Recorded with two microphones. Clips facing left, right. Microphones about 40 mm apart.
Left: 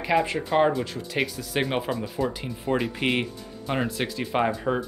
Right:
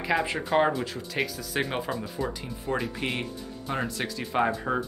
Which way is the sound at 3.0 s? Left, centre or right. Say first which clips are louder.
Left 5 dB; left.